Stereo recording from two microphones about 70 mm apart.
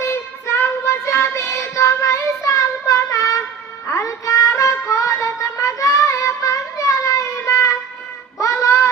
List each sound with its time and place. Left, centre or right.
0.1 s child singing: left
3.8 s music: left
8.4 s a sound: left